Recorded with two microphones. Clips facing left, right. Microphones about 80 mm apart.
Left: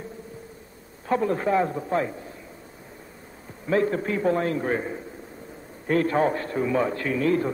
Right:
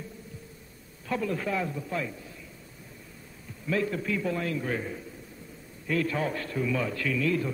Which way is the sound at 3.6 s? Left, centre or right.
Left.